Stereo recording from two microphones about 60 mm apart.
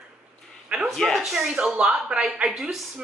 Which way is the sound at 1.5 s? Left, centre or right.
Centre.